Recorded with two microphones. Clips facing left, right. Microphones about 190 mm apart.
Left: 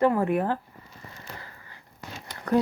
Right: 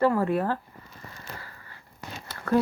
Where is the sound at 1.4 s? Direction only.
20° left (ahead or behind).